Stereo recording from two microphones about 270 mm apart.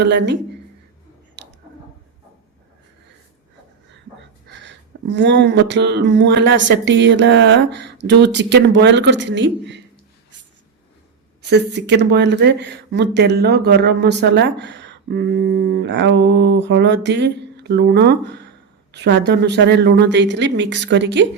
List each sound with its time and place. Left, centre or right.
0.0 s speech: right
4.4 s speech: right
11.4 s speech: right